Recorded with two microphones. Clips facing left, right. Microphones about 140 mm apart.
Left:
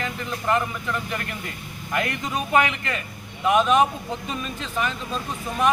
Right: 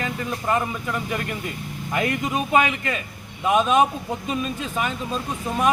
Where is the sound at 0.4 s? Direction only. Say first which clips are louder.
Left 1 dB; 15° right (ahead or behind).